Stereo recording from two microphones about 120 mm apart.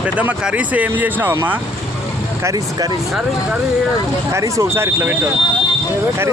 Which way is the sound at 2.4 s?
30° right (ahead or behind).